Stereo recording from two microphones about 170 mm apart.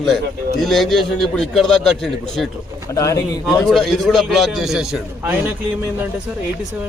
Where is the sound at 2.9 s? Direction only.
20° left (ahead or behind).